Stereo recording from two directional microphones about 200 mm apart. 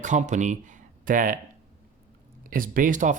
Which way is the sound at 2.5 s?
45° right (ahead or behind).